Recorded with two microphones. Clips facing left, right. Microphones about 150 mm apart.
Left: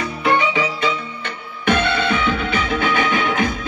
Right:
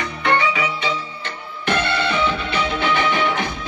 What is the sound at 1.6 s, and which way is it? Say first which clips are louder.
Music: left 3 dB; 55° left (ahead or behind).